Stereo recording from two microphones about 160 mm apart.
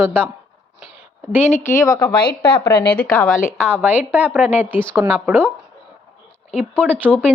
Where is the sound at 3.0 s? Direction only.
5° left (ahead or behind).